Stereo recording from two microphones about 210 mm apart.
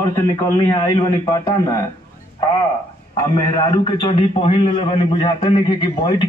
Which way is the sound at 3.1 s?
20° left (ahead or behind).